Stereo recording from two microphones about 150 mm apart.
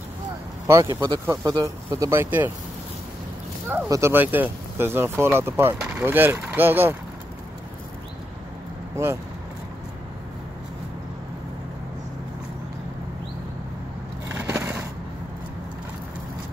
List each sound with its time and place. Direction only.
0.7 s speech: 20° right (ahead or behind)
3.6 s speech: 15° right (ahead or behind)
8.9 s speech: 15° right (ahead or behind)
14.3 s a sound: 10° right (ahead or behind)